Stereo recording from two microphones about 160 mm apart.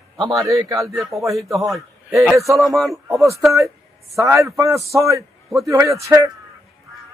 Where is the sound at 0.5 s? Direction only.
20° right (ahead or behind).